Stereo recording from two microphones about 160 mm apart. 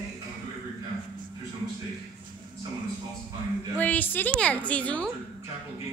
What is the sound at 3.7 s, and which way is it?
A woman's voice, 10° left (ahead or behind).